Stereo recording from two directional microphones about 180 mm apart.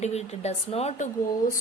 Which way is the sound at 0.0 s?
35° left (ahead or behind).